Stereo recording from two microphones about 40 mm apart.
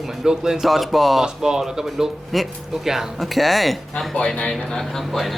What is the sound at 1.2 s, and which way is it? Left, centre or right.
Speech, centre.